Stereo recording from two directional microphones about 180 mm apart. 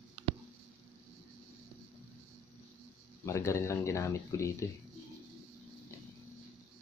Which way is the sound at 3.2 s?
15° left (ahead or behind).